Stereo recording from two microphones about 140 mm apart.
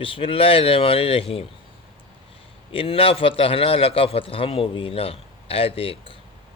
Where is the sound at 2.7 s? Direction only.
40° left (ahead or behind).